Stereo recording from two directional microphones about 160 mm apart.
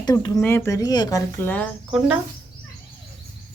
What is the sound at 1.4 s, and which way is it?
Speech, 10° left (ahead or behind).